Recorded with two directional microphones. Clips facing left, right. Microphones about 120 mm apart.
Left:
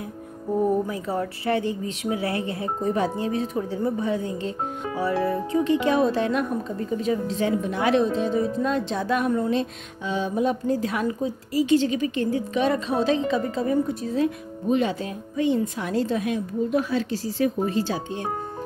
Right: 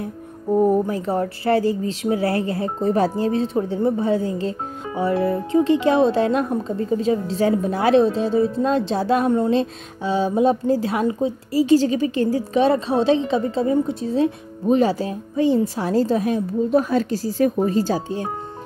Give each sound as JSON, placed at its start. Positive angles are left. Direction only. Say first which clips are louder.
{"t": 0.8, "sound": "speech", "louder": "right 5 dB", "side_deg": -30}